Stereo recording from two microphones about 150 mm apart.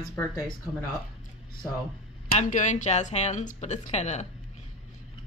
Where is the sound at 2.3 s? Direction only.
55° left (ahead or behind).